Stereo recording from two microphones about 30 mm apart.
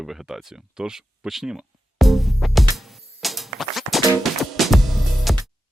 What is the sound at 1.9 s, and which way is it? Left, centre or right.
Music, centre.